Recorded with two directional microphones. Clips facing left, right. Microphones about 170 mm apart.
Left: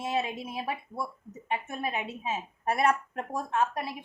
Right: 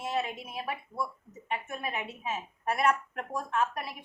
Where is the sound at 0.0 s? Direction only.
25° left (ahead or behind).